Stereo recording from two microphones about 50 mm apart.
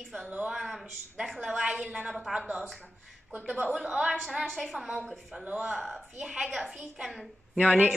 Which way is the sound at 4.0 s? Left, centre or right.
Centre.